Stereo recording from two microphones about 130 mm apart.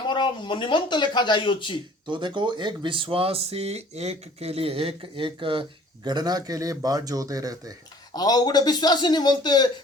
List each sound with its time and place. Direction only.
0.1 s speech: 35° left (ahead or behind)
2.0 s speech: 35° right (ahead or behind)
8.1 s speech: 30° left (ahead or behind)